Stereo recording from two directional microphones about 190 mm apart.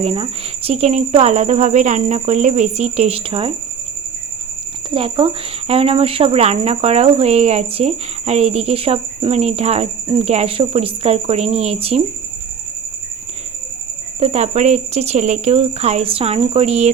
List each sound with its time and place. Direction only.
0.0 s speech: 30° right (ahead or behind)
4.9 s speech: 25° right (ahead or behind)
14.2 s speech: 35° right (ahead or behind)